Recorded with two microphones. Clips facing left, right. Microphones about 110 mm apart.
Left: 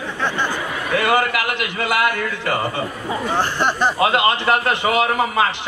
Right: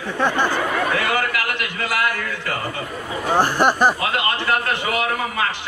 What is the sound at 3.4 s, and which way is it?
Speech, 10° right (ahead or behind).